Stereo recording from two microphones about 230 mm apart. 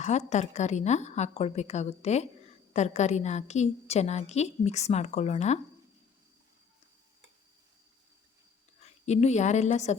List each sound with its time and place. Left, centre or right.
0.0 s a woman's voice: left
8.8 s a woman's voice: left